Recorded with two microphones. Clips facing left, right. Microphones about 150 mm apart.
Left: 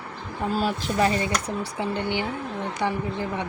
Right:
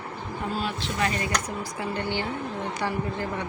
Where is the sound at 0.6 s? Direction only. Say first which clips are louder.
Left 6 dB; 35° left (ahead or behind).